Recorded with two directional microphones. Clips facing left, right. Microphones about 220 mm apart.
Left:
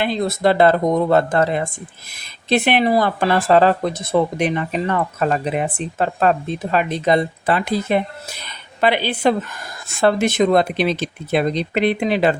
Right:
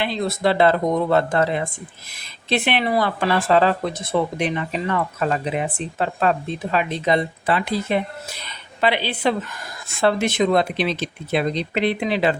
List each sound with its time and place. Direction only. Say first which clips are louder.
0.0 s speech: left 3 dB; 45° left (ahead or behind)